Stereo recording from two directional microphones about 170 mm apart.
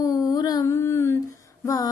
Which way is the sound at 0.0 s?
20° left (ahead or behind).